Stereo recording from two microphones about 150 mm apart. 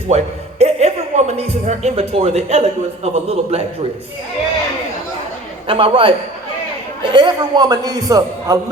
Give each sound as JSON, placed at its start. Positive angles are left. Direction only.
{"t": 0.1, "sound": "speech", "side_deg": -45}
{"t": 5.6, "sound": "a man's voice", "side_deg": -35}